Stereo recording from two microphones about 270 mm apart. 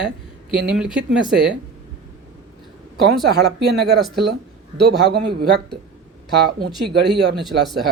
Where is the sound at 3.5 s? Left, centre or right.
Right.